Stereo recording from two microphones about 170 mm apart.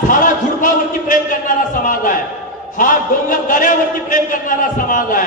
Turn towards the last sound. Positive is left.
turn(degrees=50)  # may be behind; listen again after turning